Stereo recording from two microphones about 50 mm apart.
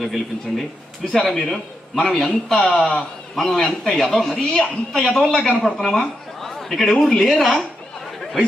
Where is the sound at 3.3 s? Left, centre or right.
Centre.